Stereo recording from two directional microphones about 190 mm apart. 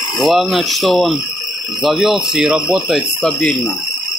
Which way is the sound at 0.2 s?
Centre (ahead or behind).